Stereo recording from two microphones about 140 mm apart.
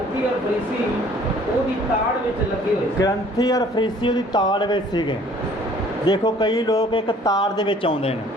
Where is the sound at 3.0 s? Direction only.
25° left (ahead or behind).